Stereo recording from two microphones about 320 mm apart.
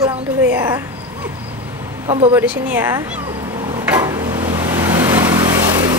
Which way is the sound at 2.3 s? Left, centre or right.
Centre.